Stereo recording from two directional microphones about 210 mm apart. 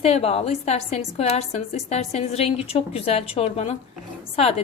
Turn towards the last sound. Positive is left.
turn(degrees=30)  # may be behind; listen again after turning